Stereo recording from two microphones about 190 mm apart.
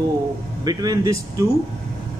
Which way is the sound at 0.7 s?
20° right (ahead or behind).